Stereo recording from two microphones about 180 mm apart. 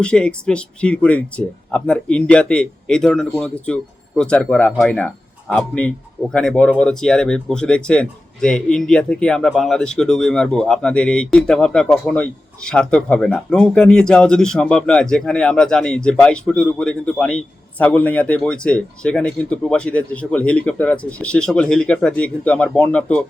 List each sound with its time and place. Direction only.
0.0 s speech: 5° left (ahead or behind)